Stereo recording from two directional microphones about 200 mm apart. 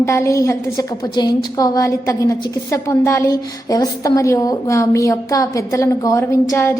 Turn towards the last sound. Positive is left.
turn(degrees=15)  # may be behind; listen again after turning